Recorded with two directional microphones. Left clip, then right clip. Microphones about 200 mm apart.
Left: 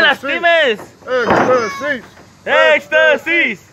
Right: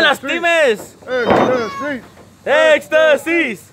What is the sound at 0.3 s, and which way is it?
Speech, 20° right (ahead or behind).